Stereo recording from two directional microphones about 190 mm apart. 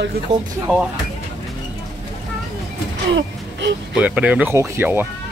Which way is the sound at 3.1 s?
70° right (ahead or behind).